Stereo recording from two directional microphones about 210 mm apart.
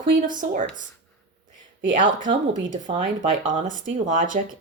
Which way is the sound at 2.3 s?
25° right (ahead or behind).